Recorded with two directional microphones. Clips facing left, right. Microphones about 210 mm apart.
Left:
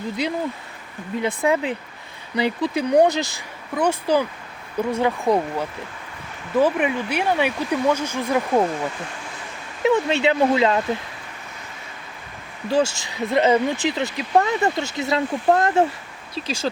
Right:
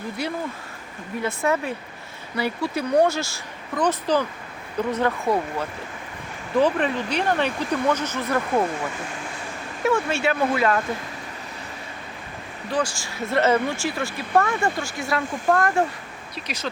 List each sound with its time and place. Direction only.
0.2 s speech: 15° left (ahead or behind)
9.8 s speech: 20° left (ahead or behind)
12.7 s speech: 25° left (ahead or behind)